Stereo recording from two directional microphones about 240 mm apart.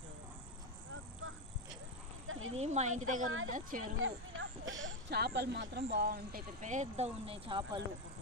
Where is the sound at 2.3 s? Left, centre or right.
Right.